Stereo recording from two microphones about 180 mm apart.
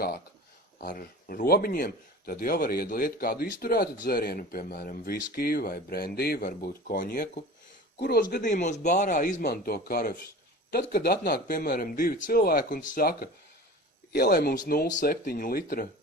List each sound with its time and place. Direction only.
0.8 s a man's voice: 55° left (ahead or behind)
9.4 s a man's voice: 60° left (ahead or behind)